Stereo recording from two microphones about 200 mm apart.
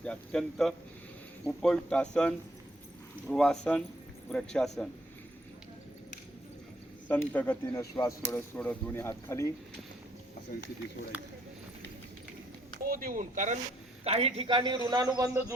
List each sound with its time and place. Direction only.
0.0 s speech: 5° left (ahead or behind)
7.1 s speech: 10° left (ahead or behind)
11.1 s speech: 5° right (ahead or behind)
12.9 s a man's voice: 45° right (ahead or behind); by 15.5 s 15° right (ahead or behind)